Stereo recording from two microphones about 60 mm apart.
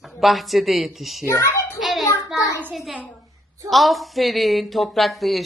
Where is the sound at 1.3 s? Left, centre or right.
Left.